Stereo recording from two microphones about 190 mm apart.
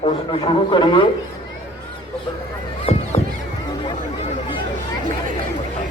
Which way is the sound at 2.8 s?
35° left (ahead or behind).